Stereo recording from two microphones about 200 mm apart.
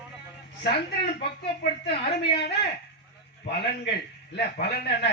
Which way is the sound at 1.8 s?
55° left (ahead or behind).